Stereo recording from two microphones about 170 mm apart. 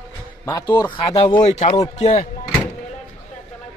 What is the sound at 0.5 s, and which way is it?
Mantra, 20° left (ahead or behind).